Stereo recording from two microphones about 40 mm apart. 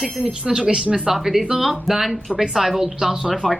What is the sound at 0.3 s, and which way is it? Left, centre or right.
Speech, right.